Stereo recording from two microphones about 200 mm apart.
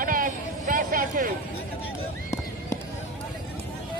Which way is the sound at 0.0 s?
45° right (ahead or behind).